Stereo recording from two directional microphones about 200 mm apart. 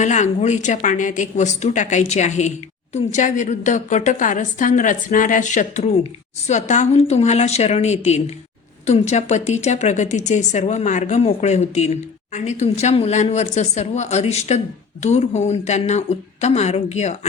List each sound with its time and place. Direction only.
0.0 s a woman's voice: 35° left (ahead or behind)